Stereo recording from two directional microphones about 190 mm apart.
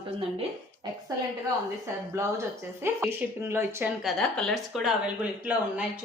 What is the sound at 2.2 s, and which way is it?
Speech, 15° right (ahead or behind).